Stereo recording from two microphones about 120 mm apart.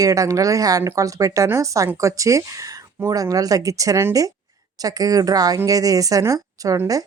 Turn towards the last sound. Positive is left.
turn(degrees=-30)  # may be behind; listen again after turning